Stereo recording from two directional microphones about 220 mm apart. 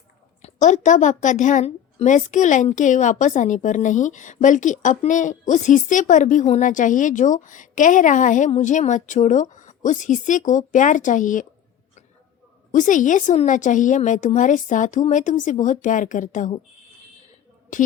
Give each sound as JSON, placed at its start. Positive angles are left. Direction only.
{"t": 0.4, "sound": "a woman's voice", "side_deg": 35}
{"t": 12.7, "sound": "a woman's voice", "side_deg": 35}
{"t": 17.7, "sound": "a woman's voice", "side_deg": 35}